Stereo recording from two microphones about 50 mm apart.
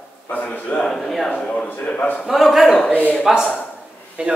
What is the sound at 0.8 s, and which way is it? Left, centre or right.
A man's voice, centre.